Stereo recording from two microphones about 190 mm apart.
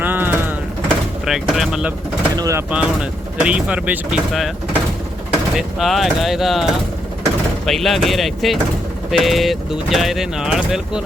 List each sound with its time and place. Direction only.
0.0 s a sound: 10° right (ahead or behind)
1.2 s speech: centre (ahead or behind)
2.3 s speech: 15° right (ahead or behind)